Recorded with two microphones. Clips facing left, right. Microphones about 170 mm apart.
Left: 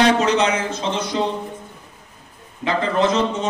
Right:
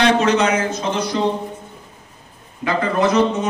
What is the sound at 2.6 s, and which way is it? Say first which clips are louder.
Speech: right 1 dB; 25° left (ahead or behind).